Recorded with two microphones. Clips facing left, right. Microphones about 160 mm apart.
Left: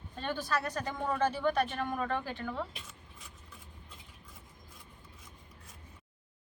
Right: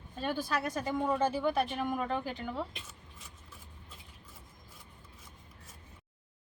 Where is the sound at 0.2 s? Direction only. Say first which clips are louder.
Right 1 dB; 10° right (ahead or behind).